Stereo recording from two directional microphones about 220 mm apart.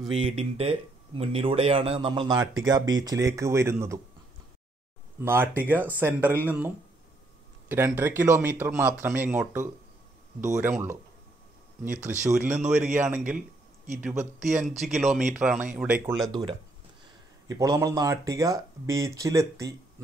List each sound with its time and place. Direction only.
0.2 s speech: 25° right (ahead or behind)
5.2 s speech: 10° right (ahead or behind)
14.4 s speech: centre (ahead or behind)
16.3 s speech: 20° right (ahead or behind)